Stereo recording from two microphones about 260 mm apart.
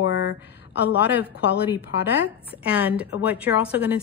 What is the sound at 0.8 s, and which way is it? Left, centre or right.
A woman's voice, centre.